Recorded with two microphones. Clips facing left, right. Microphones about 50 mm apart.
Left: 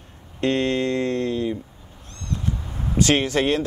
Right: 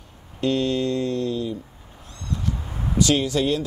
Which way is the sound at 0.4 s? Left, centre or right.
Left.